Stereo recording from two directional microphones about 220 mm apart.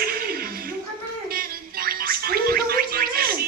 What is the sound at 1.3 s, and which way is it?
Gargling, 40° right (ahead or behind).